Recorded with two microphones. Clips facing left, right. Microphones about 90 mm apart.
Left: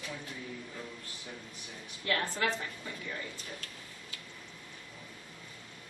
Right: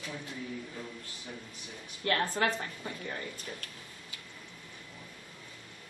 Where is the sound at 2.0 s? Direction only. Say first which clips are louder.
Right 3 dB; 45° right (ahead or behind).